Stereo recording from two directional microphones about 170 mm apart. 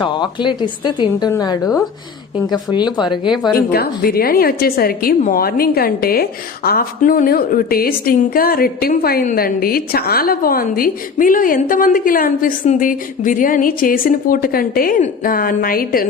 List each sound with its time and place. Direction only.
0.0 s speech: 25° left (ahead or behind)
3.7 s a woman's voice: 65° left (ahead or behind)